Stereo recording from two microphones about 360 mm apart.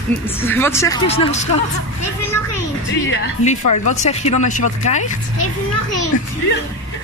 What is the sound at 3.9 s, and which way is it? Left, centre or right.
Speech, centre.